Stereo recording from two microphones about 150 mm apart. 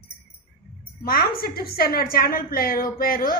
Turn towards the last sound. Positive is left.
turn(degrees=75)  # may be behind; listen again after turning